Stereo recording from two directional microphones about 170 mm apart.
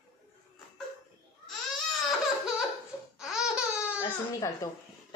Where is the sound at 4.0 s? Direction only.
20° left (ahead or behind).